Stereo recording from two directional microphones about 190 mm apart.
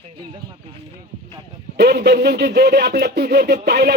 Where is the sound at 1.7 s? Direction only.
60° right (ahead or behind).